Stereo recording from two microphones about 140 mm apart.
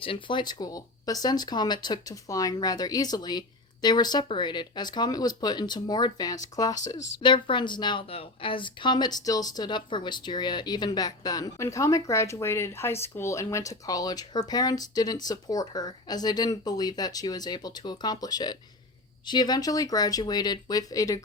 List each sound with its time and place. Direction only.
0.0 s speech: 40° left (ahead or behind)